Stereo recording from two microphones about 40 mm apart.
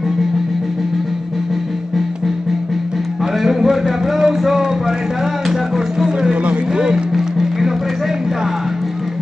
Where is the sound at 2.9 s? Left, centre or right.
Centre.